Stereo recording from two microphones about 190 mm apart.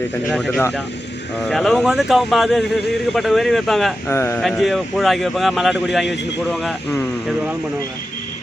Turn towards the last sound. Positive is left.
turn(degrees=0)  # may be behind; listen again after turning